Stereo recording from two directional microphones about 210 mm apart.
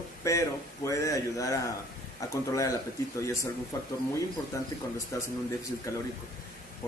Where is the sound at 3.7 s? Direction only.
15° left (ahead or behind).